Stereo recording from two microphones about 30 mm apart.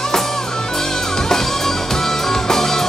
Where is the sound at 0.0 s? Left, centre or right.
Centre.